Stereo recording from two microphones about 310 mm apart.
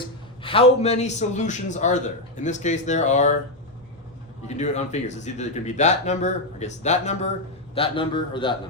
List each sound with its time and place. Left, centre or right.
0.0 s a man's voice: centre
4.4 s a man's voice: left